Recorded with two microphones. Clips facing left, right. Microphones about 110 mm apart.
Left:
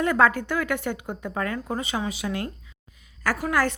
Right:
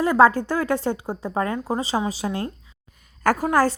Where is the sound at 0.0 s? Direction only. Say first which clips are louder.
Right 5 dB; 30° right (ahead or behind).